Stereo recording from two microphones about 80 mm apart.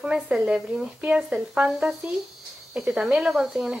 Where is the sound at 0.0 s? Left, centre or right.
Centre.